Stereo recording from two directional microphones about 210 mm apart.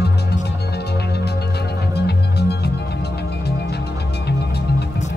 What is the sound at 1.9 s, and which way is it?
Music, 50° left (ahead or behind).